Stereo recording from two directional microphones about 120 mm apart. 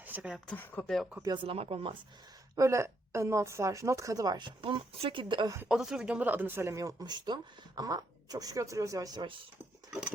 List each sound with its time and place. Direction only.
0.0 s a sound: 15° right (ahead or behind)
0.5 s speech: 15° left (ahead or behind)
1.2 s speech: 35° right (ahead or behind)
1.5 s speech: 55° right (ahead or behind)
2.6 s a woman's voice: 25° right (ahead or behind); by 5.5 s 45° right (ahead or behind)
5.6 s speech: 5° right (ahead or behind); by 9.2 s 30° right (ahead or behind)